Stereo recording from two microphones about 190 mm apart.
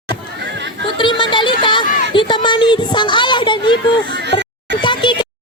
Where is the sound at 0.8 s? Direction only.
25° left (ahead or behind).